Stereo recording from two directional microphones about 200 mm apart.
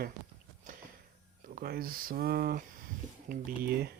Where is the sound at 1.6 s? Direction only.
50° right (ahead or behind).